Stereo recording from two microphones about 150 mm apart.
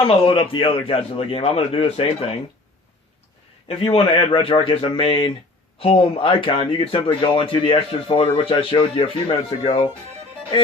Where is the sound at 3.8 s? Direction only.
35° left (ahead or behind).